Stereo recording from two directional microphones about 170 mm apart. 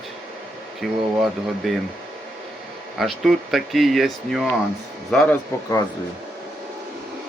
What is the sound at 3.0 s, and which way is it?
Speech, centre (ahead or behind).